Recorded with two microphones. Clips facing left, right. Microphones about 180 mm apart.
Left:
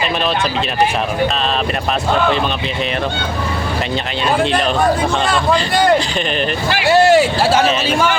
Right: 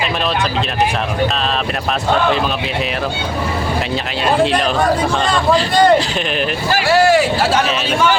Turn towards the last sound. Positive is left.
turn(degrees=25)  # may be behind; listen again after turning